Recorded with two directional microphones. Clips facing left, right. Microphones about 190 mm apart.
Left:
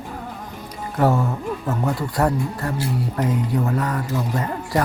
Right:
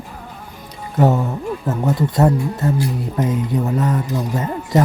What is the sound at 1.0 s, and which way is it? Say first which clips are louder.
Speech: right 3 dB; 20° right (ahead or behind).